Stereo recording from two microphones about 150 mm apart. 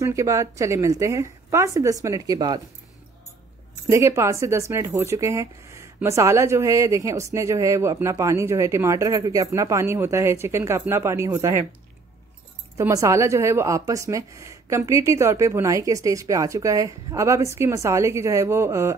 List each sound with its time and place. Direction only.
0.0 s speech: 20° right (ahead or behind)
3.9 s speech: 20° right (ahead or behind)
12.7 s speech: 20° right (ahead or behind)